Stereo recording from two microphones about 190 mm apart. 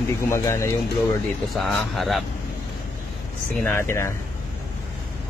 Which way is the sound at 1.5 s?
Centre (ahead or behind).